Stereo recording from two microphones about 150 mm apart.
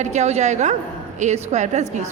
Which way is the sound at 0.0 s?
50° right (ahead or behind).